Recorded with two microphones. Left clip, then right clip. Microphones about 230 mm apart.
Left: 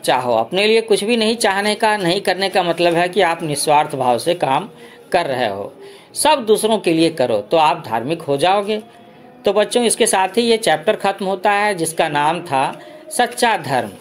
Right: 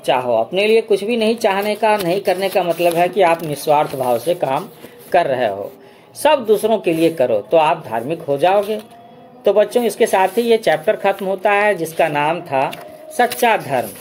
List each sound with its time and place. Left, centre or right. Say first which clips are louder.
0.0 s speech: even; centre
6.6 s speech: even; centre
11.6 s a woman's voice: right 2 dB; left
12.0 s speech: left 1 dB; centre